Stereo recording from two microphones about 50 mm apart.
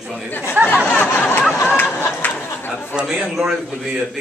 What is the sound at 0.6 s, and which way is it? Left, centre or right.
Speech, right.